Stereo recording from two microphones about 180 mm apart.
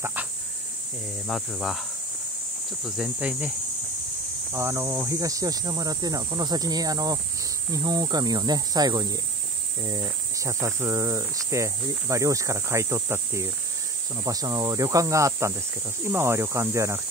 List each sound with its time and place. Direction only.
0.0 s a sound: 10° right (ahead or behind)
1.2 s speech: centre (ahead or behind)
2.8 s speech: 5° right (ahead or behind)